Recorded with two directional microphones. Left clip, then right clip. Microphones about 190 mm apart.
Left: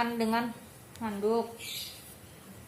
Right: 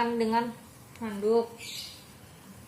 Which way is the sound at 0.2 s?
35° left (ahead or behind).